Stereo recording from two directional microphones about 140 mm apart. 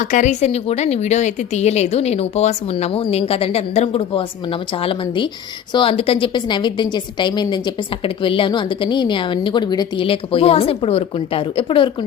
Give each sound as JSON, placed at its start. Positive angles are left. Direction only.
{"t": 0.0, "sound": "a woman's voice", "side_deg": 65}